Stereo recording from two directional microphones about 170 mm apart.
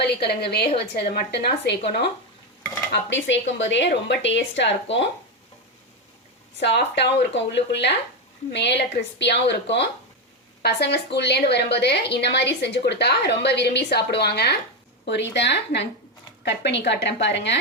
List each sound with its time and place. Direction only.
0.0 s a woman's voice: 70° left (ahead or behind)
2.9 s speech: 90° left
6.6 s a woman's voice: 90° left
10.6 s a woman's voice: 75° left (ahead or behind)
15.0 s speech: 90° left